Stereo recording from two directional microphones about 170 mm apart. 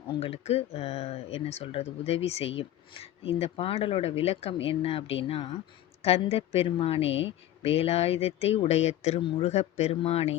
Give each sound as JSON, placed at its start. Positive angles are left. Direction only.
{"t": 0.1, "sound": "speech", "side_deg": 35}
{"t": 7.1, "sound": "speech", "side_deg": 90}
{"t": 7.6, "sound": "speech", "side_deg": 35}